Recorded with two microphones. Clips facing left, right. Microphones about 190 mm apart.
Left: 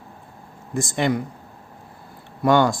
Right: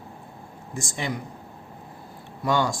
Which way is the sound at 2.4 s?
60° left (ahead or behind).